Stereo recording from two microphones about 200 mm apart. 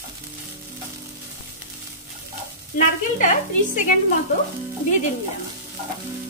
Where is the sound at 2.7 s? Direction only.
40° left (ahead or behind).